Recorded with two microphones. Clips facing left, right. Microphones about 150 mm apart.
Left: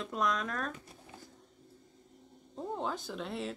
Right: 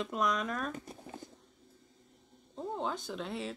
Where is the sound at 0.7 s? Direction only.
45° right (ahead or behind).